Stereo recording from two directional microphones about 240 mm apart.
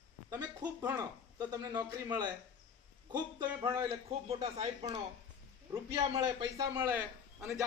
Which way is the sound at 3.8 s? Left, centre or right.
Right.